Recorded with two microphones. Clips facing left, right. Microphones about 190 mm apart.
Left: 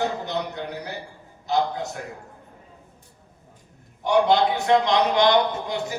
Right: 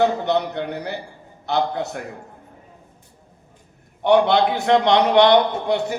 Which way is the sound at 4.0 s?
70° right (ahead or behind).